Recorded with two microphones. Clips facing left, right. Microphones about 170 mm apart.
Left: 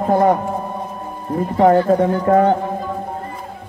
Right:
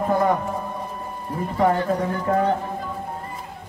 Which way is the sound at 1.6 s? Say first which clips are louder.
Left 8 dB; 50° left (ahead or behind).